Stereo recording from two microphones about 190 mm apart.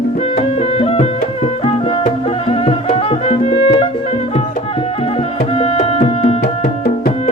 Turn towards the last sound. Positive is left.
turn(degrees=50)  # may be behind; listen again after turning